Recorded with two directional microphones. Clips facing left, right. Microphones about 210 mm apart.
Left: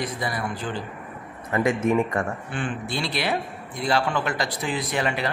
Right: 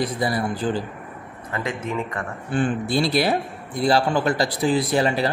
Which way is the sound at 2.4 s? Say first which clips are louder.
Right 7 dB; 40° right (ahead or behind).